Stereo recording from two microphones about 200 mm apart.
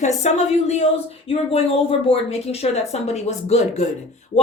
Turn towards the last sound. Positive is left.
turn(degrees=35)  # may be behind; listen again after turning